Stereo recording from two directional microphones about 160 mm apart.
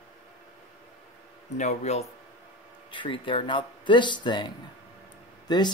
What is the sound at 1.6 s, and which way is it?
Speech, 45° left (ahead or behind).